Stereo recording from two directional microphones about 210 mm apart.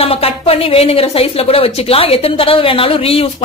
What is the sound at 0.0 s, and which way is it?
Speech, 25° left (ahead or behind).